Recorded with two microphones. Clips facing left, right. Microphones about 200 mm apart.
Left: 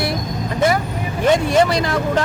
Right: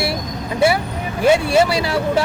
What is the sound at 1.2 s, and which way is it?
Speech, 10° right (ahead or behind).